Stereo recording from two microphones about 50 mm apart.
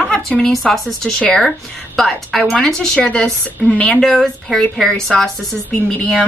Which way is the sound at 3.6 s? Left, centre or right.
Left.